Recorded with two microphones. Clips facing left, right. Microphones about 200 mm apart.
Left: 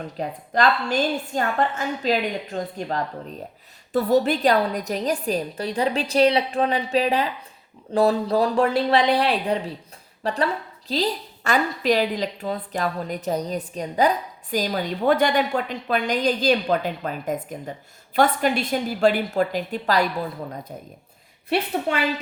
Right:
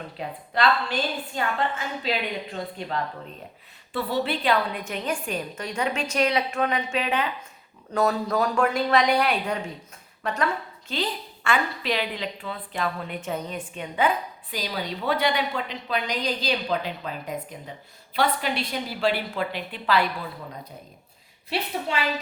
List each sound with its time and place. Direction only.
0.2 s a woman's voice: 45° left (ahead or behind)
21.9 s a woman's voice: 55° left (ahead or behind)